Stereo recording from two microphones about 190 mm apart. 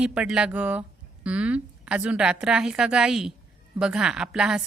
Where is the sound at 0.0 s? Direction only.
5° right (ahead or behind).